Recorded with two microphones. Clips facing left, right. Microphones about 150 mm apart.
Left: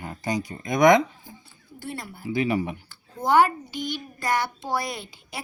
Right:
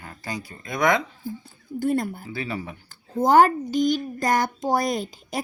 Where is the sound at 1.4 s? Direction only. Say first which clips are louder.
Right 13 dB; 45° right (ahead or behind).